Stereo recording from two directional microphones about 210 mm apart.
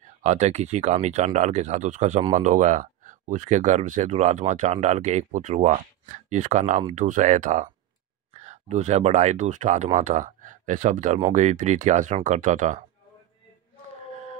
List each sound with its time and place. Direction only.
0.2 s speech: 35° right (ahead or behind)